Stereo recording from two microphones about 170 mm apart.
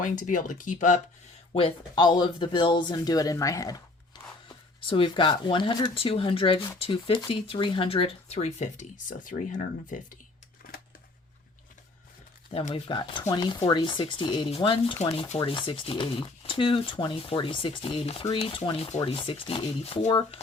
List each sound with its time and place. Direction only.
0.0 s speech: 50° left (ahead or behind)
1.5 s speech: 30° left (ahead or behind); by 10.1 s 50° left (ahead or behind)
10.6 s a sound: 55° left (ahead or behind)
12.5 s speech: 35° left (ahead or behind)